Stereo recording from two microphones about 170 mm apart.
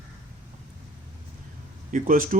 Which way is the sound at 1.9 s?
50° right (ahead or behind).